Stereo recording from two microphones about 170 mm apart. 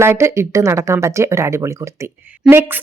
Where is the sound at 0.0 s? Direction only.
15° right (ahead or behind).